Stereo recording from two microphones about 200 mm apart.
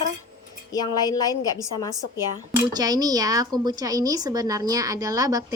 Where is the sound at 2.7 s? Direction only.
20° right (ahead or behind).